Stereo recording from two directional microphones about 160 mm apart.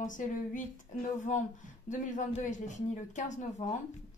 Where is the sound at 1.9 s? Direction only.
50° left (ahead or behind).